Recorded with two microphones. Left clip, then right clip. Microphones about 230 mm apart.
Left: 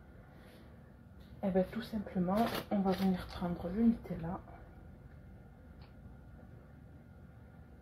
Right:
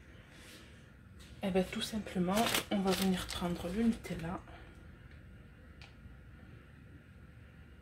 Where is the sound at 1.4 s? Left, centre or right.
Right.